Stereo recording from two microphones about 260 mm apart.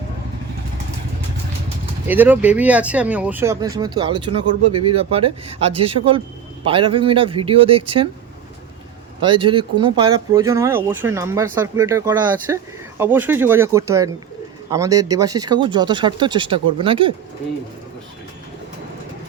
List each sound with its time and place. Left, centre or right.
2.0 s speech: centre
9.2 s speech: centre